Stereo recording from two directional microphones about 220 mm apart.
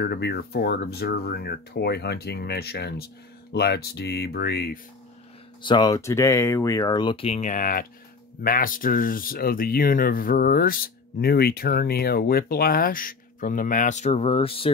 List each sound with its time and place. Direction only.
0.0 s speech: 50° left (ahead or behind)
5.6 s speech: 20° left (ahead or behind)